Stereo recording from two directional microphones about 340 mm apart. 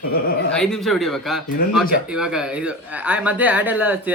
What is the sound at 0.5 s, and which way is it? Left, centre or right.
Speech, centre.